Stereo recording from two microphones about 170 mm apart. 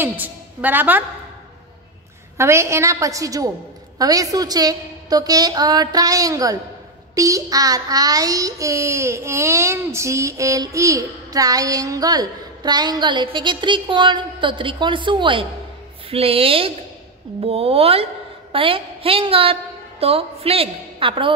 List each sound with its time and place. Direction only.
0.0 s a woman's voice: 10° right (ahead or behind)
2.3 s a woman's voice: 15° right (ahead or behind)
4.0 s child singing: 20° right (ahead or behind)
16.1 s a woman's voice: 35° right (ahead or behind)